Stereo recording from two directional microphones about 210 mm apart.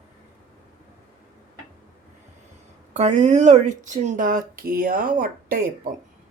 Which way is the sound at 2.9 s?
35° right (ahead or behind).